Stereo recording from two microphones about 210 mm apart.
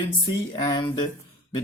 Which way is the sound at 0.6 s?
20° left (ahead or behind).